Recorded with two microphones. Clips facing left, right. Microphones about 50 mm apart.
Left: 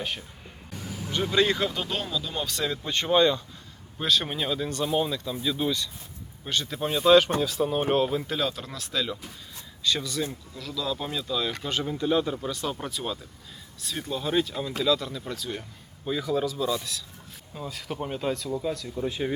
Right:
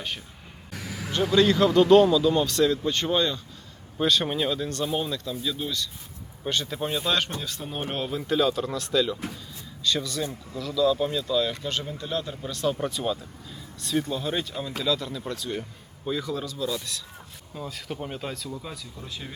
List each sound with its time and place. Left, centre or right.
0.7 s vehicle: right
1.3 s speech: centre
3.9 s speech: centre
6.4 s speech: centre
19.0 s speech: left